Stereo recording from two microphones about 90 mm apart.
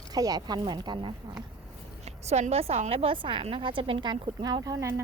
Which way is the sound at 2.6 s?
85° right.